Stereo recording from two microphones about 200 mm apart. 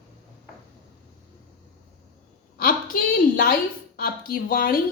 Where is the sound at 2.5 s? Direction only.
45° left (ahead or behind).